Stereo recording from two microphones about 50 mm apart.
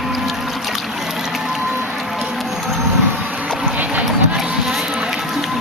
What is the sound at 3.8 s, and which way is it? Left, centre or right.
Run, right.